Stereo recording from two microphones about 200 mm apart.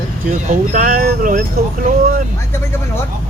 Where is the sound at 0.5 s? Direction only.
40° right (ahead or behind).